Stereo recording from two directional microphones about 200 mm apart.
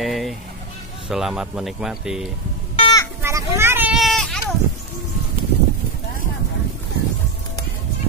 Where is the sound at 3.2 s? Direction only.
15° right (ahead or behind).